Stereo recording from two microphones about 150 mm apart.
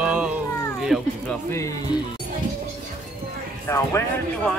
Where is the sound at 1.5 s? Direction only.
20° left (ahead or behind).